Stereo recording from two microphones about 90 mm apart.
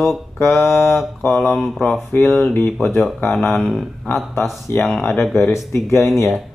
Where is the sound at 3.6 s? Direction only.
5° left (ahead or behind).